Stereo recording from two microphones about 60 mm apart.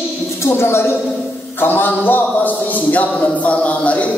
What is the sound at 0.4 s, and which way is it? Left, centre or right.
A woman's voice, left.